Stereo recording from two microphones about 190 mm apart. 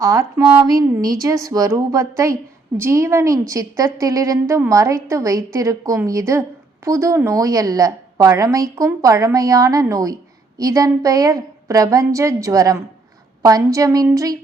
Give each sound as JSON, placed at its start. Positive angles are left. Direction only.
{"t": 0.0, "sound": "a woman's voice", "side_deg": -15}